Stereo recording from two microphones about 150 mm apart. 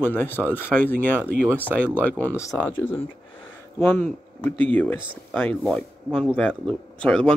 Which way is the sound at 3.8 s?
15° left (ahead or behind).